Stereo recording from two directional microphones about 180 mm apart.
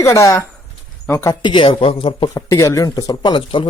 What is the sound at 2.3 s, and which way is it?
Speech, 20° left (ahead or behind).